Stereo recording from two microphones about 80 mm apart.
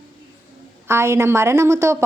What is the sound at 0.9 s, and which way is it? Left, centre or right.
A woman's voice, right.